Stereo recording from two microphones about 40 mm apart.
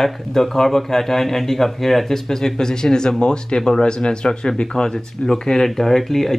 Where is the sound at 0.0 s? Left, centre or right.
Centre.